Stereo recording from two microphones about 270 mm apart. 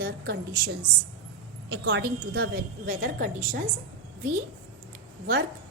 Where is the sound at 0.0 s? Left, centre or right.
Right.